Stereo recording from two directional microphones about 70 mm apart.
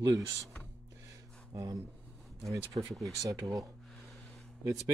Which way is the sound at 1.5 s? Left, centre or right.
Right.